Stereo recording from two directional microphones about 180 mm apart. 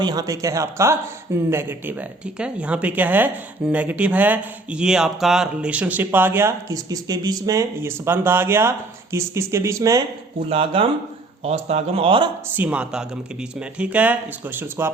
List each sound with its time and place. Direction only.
0.0 s a man's voice: 20° right (ahead or behind)
10.5 s speech: 30° right (ahead or behind)
12.5 s a man's voice: 10° right (ahead or behind)